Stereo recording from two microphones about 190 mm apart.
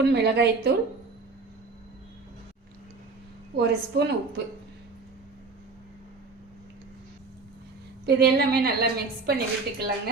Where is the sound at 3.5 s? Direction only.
60° right (ahead or behind).